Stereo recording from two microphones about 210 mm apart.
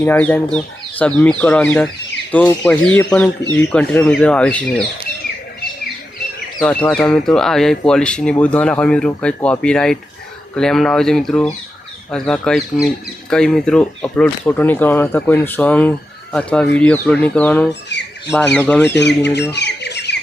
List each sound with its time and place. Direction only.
0.0 s speech: 10° left (ahead or behind)
6.6 s speech: 5° left (ahead or behind)
17.7 s speech: 55° left (ahead or behind)
18.3 s speech: 10° left (ahead or behind)
18.9 s speech: 55° left (ahead or behind)